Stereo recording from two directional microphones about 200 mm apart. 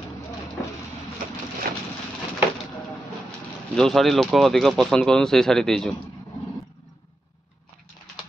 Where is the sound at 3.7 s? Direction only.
Centre (ahead or behind).